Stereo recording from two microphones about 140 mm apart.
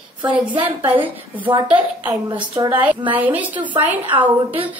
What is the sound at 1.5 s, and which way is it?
Speech, 35° right (ahead or behind).